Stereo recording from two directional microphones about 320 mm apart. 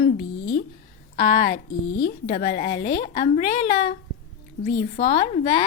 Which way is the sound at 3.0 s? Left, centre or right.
Centre.